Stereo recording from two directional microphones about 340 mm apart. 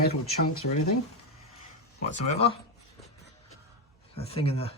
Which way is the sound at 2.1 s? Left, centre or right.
Centre.